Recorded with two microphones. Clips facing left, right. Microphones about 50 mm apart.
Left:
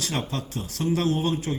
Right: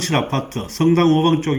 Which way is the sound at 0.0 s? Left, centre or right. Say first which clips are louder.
Right 10 dB; right.